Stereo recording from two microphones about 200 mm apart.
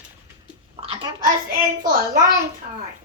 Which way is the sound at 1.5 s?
45° right (ahead or behind).